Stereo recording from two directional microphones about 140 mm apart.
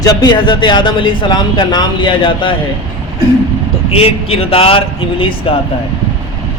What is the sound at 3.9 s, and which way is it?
A man's voice, 45° left (ahead or behind).